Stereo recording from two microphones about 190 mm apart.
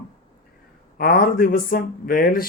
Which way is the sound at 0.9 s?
50° left (ahead or behind).